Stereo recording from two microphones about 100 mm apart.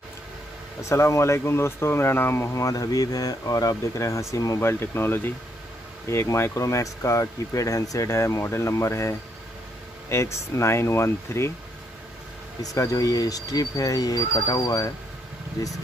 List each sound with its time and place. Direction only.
0.7 s speech: 30° left (ahead or behind)
12.6 s speech: 35° left (ahead or behind)